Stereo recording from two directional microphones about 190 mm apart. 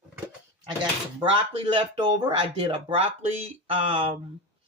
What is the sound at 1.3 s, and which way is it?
Speech, 25° right (ahead or behind).